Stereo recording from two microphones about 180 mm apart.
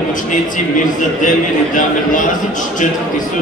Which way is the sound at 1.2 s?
45° left (ahead or behind).